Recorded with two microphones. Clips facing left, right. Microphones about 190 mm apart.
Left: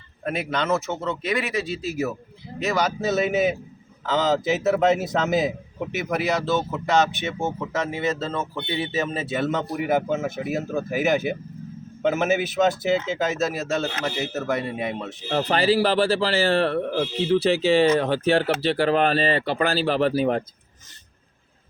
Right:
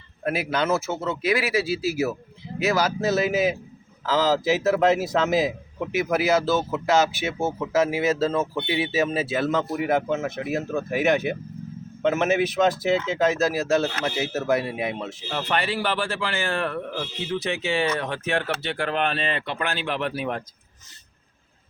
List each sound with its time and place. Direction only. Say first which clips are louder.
0.3 s speech: right 1 dB; 5° right (ahead or behind)
15.3 s speech: left 6 dB; 35° left (ahead or behind)